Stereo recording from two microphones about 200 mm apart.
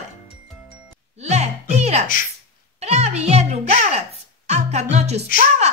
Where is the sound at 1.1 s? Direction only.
35° right (ahead or behind).